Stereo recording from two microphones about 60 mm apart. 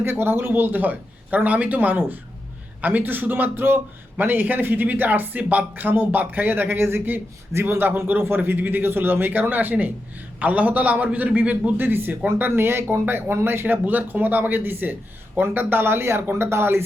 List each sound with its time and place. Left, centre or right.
0.0 s a man's voice: right